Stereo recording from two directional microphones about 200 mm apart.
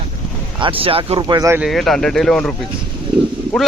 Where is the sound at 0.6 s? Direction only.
25° right (ahead or behind).